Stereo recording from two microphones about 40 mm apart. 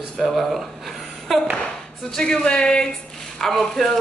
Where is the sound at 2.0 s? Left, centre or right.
Centre.